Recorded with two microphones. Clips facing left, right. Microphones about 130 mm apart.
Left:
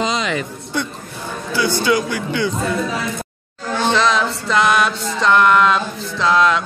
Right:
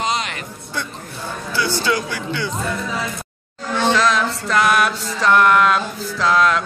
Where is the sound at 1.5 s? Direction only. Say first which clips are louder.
Left 3 dB; 15° left (ahead or behind).